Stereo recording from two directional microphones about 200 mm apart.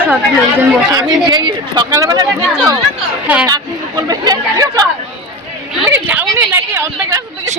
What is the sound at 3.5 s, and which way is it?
A woman's voice, 20° right (ahead or behind).